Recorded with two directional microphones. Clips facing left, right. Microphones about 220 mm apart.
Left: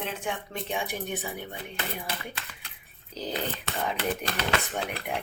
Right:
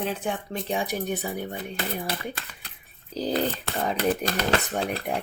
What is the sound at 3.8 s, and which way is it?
A woman's voice, 40° right (ahead or behind).